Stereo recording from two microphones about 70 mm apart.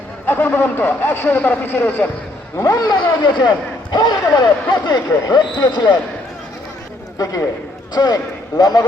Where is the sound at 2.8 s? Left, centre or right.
Left.